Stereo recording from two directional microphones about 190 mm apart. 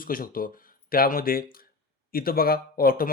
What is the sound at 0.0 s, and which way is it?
A man's voice, 50° left (ahead or behind).